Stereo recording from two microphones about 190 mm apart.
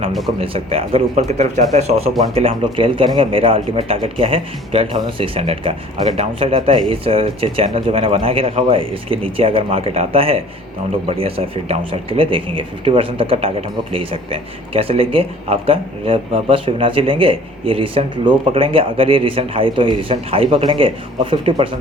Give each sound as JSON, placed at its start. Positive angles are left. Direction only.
{"t": 0.3, "sound": "speech", "side_deg": -30}